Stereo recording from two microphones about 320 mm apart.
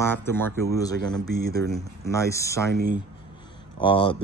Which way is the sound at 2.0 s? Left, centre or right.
Centre.